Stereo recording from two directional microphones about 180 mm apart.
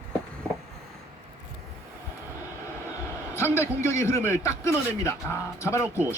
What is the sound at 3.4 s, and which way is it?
A man's voice, 15° left (ahead or behind).